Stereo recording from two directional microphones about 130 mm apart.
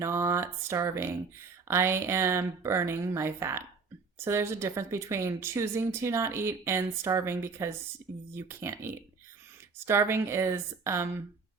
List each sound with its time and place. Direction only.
0.0 s speech: 20° right (ahead or behind)